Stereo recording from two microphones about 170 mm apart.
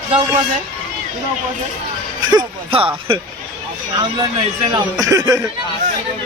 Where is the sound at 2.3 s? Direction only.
30° right (ahead or behind).